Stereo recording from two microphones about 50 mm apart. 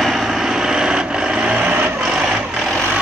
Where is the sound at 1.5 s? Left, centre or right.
Right.